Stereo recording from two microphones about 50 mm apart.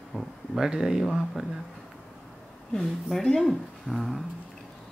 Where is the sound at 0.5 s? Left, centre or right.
Centre.